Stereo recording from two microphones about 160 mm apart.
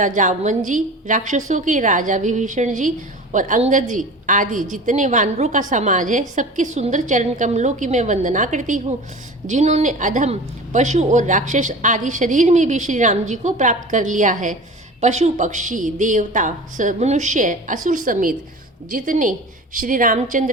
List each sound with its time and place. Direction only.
0.0 s a woman's voice: 50° right (ahead or behind)